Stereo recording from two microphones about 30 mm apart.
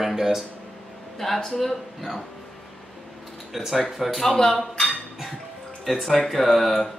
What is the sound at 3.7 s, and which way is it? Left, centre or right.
Speech, centre.